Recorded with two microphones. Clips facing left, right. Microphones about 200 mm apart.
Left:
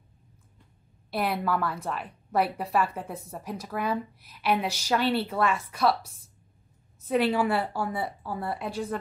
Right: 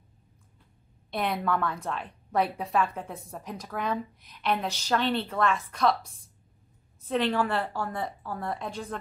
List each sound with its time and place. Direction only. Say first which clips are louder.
1.1 s a woman's voice: left 1 dB; 5° left (ahead or behind)
7.1 s a woman's voice: left 2 dB; 10° left (ahead or behind)